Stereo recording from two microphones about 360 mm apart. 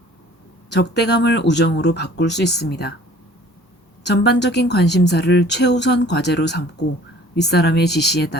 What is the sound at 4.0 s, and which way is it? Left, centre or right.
Speech, left.